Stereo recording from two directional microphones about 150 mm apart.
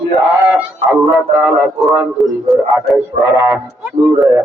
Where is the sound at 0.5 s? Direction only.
10° right (ahead or behind).